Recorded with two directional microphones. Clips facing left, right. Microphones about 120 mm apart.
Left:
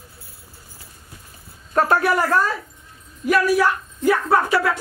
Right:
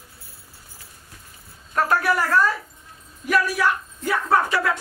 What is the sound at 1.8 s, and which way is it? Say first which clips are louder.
Music: left 3 dB; 25° left (ahead or behind).